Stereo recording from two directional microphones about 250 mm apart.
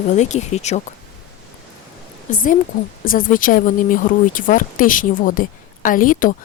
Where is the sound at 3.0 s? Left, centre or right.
Left.